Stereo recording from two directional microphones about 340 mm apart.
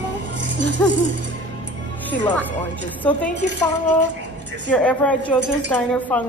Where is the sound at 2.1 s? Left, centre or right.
Centre.